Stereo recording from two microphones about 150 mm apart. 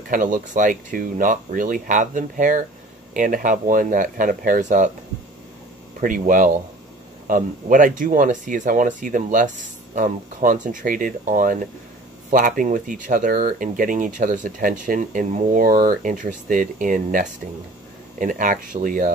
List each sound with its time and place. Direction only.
0.1 s speech: 60° right (ahead or behind)
5.9 s speech: 65° right (ahead or behind)